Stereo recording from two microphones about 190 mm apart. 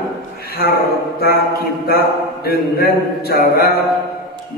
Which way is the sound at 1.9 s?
55° left (ahead or behind).